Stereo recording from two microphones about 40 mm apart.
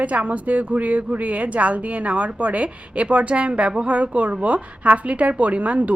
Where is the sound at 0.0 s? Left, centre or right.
Right.